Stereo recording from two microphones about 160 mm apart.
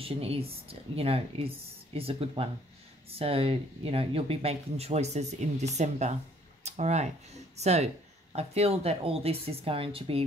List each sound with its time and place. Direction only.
0.0 s speech: 35° right (ahead or behind)
6.6 s a sound: 45° right (ahead or behind)
7.5 s speech: 40° right (ahead or behind)